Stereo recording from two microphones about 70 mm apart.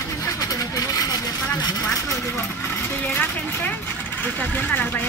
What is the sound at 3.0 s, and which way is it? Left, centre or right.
A woman's voice, left.